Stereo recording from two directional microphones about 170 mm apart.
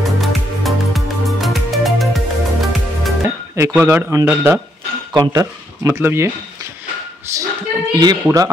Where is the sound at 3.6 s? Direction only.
15° right (ahead or behind).